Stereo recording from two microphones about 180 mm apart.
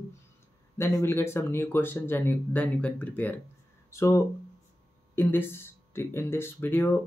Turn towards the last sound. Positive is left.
turn(degrees=10)  # may be behind; listen again after turning